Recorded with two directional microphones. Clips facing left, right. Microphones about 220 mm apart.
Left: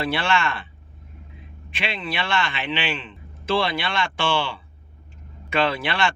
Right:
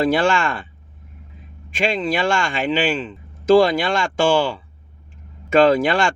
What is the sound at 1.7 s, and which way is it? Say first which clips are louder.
Speech: right 9 dB; 45° right (ahead or behind).